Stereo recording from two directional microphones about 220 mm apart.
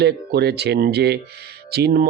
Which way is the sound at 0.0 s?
50° right (ahead or behind).